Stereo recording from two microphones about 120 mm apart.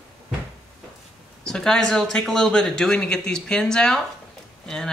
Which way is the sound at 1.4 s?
5° left (ahead or behind).